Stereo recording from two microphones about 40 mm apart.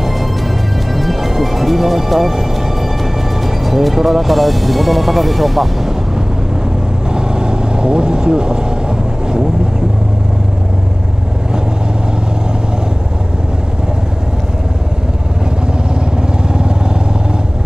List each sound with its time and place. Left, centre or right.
0.9 s music: centre
3.4 s speech: centre
7.1 s vehicle: right